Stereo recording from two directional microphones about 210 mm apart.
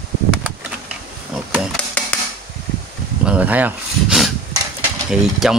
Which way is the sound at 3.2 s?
5° right (ahead or behind).